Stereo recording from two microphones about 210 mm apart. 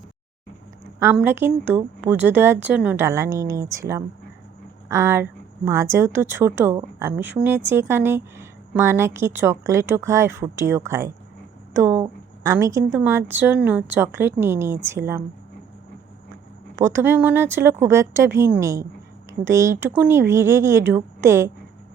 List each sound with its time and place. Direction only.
0.9 s speech: 10° right (ahead or behind)
16.7 s speech: 10° right (ahead or behind)